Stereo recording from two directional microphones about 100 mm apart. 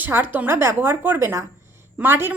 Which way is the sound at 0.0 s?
20° right (ahead or behind).